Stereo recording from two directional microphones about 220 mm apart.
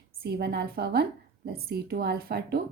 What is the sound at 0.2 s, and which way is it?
A woman's voice, 45° right (ahead or behind).